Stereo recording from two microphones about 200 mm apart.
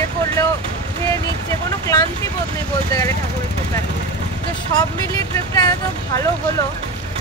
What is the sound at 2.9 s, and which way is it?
Speech, 15° left (ahead or behind).